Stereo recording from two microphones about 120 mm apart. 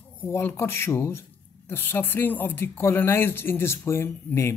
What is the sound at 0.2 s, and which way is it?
Speech, 20° left (ahead or behind).